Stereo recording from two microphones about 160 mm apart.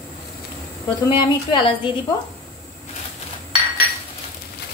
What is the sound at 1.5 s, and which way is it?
Speech, 30° left (ahead or behind).